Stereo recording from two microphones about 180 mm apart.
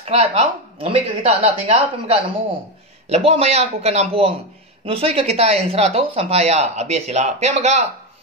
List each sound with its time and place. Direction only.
0.0 s speech: 35° right (ahead or behind)